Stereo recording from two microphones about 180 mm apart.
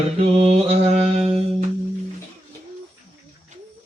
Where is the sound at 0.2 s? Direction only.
35° right (ahead or behind).